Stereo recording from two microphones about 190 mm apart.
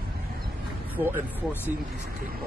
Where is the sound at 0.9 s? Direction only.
10° right (ahead or behind).